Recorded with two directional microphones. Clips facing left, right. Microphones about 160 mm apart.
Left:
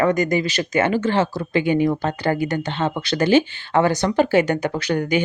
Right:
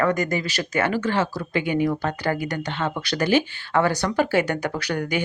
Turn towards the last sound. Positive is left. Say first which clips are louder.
# left 5 dB
turn(degrees=20)  # may be behind; listen again after turning